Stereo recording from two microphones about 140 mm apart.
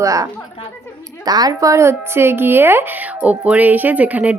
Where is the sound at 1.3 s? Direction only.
25° right (ahead or behind).